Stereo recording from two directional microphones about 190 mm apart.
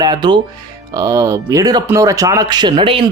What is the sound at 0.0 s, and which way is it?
Speech, 20° right (ahead or behind).